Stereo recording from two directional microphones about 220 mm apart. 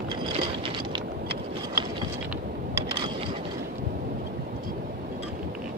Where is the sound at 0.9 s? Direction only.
20° right (ahead or behind).